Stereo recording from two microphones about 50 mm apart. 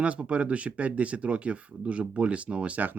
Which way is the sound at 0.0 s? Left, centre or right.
Right.